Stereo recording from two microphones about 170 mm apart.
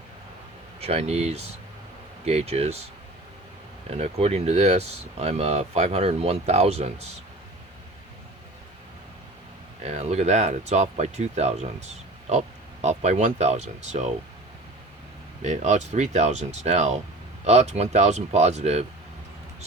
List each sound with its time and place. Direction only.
0.8 s speech: 35° right (ahead or behind)
3.8 s speech: 40° right (ahead or behind)
9.8 s speech: 40° right (ahead or behind)
12.8 s speech: 40° right (ahead or behind)
15.4 s speech: 40° right (ahead or behind)